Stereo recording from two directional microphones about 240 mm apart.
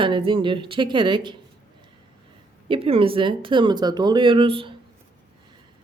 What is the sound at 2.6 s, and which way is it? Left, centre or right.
Speech, right.